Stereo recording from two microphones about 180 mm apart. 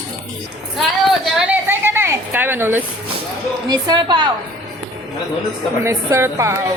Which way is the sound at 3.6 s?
20° right (ahead or behind).